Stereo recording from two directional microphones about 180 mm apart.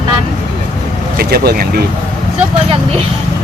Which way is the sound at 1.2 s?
60° right (ahead or behind).